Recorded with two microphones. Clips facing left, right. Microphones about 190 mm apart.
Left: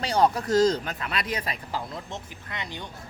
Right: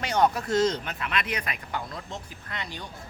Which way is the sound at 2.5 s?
20° left (ahead or behind).